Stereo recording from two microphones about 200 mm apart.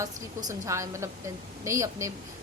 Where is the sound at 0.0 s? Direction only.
15° right (ahead or behind).